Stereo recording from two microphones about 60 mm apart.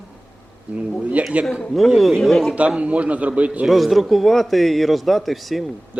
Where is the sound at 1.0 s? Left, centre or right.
Right.